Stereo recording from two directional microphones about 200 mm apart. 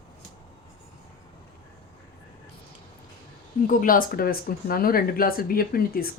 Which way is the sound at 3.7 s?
45° left (ahead or behind).